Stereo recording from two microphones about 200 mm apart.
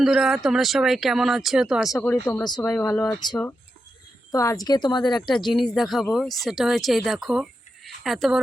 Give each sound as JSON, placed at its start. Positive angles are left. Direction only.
{"t": 0.0, "sound": "speech", "side_deg": 0}
{"t": 2.0, "sound": "speech", "side_deg": 10}
{"t": 2.4, "sound": "speech", "side_deg": 20}
{"t": 4.3, "sound": "speech", "side_deg": 15}
{"t": 5.5, "sound": "a woman's voice", "side_deg": 0}